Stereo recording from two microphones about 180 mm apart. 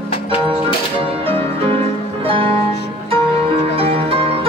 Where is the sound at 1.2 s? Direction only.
30° right (ahead or behind).